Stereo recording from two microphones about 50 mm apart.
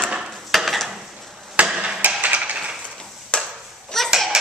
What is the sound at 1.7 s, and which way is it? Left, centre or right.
Hammer, centre.